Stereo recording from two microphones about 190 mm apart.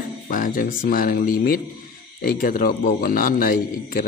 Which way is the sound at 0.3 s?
45° left (ahead or behind).